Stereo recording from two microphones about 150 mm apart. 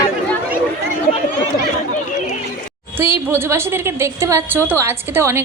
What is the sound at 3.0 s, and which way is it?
A woman's voice, 15° right (ahead or behind).